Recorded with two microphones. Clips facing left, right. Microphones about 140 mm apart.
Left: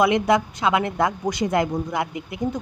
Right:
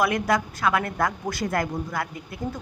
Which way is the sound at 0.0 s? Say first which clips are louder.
Left 5 dB; 20° left (ahead or behind).